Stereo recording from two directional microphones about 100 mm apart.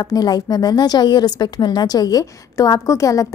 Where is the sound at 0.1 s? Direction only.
40° left (ahead or behind).